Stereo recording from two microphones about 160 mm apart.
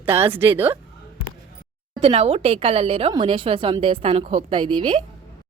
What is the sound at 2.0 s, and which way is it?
Speech, 40° right (ahead or behind).